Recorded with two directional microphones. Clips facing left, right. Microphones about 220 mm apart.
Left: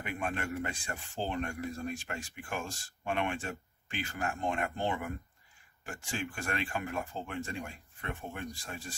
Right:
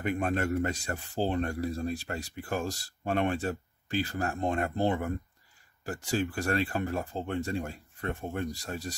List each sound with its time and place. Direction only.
0.0 s speech: 40° right (ahead or behind)